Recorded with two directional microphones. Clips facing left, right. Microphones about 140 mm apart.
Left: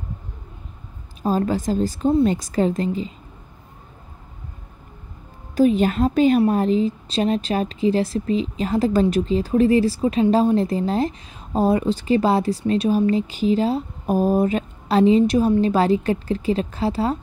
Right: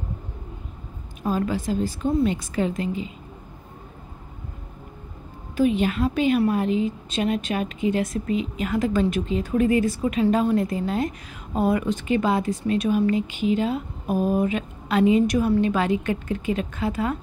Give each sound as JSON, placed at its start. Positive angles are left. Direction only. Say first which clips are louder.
{"t": 1.2, "sound": "a woman's voice", "louder": "left 4 dB", "side_deg": 35}
{"t": 5.6, "sound": "a woman's voice", "louder": "left 4 dB", "side_deg": 40}